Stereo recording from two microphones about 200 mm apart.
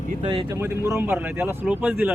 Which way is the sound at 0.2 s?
25° right (ahead or behind).